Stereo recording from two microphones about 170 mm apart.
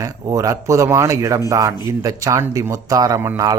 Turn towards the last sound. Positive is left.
turn(degrees=-15)  # may be behind; listen again after turning